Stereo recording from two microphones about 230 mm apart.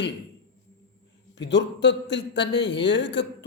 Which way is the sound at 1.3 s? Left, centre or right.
Left.